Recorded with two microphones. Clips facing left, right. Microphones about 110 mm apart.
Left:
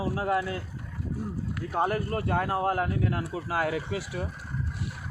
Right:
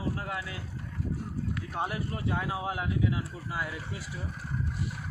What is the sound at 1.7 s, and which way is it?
Speech, 45° left (ahead or behind).